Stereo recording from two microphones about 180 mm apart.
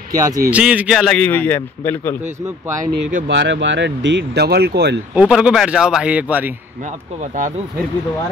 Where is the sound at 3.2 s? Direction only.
75° right (ahead or behind).